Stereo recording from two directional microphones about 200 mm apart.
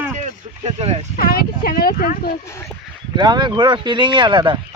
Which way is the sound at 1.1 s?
50° left (ahead or behind).